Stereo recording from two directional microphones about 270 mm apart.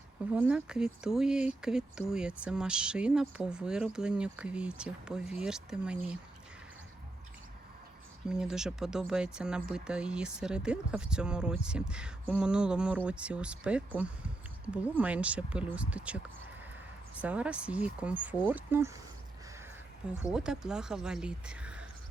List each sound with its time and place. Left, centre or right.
0.3 s speech: centre
8.3 s speech: centre
20.3 s speech: centre